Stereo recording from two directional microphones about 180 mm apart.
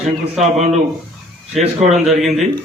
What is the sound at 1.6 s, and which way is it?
Speech, 35° right (ahead or behind).